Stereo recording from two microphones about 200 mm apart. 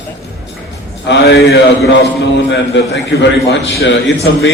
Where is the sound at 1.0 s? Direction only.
60° left (ahead or behind).